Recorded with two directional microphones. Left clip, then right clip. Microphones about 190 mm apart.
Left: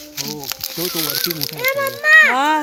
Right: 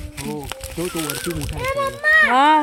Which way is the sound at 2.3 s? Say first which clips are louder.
Right 2 dB; 15° right (ahead or behind).